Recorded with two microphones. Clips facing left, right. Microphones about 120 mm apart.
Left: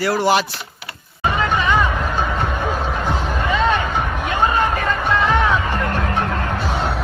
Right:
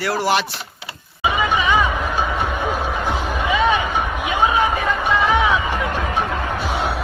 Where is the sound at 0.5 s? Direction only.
25° right (ahead or behind).